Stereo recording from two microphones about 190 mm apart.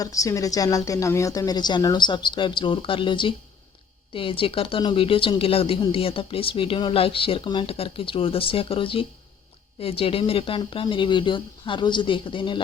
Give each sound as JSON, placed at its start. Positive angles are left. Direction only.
{"t": 0.0, "sound": "speech", "side_deg": 15}